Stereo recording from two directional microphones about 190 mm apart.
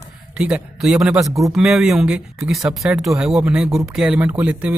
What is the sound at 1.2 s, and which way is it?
Speech, 15° right (ahead or behind).